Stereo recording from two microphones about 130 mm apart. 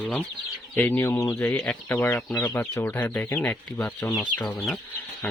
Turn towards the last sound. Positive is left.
turn(degrees=15)  # may be behind; listen again after turning